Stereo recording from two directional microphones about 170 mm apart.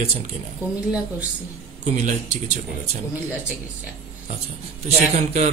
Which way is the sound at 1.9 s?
45° right (ahead or behind).